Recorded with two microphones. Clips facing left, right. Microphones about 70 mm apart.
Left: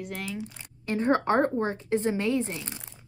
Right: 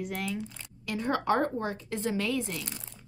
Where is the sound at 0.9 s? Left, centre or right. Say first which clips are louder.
Left 4 dB; left.